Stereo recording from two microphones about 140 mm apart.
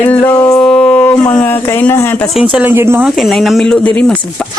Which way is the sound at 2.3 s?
10° right (ahead or behind).